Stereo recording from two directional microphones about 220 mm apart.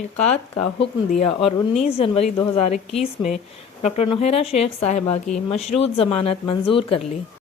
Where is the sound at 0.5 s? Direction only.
25° left (ahead or behind).